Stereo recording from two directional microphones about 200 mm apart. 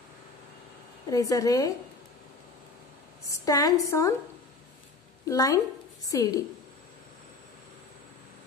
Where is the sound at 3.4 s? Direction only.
15° left (ahead or behind).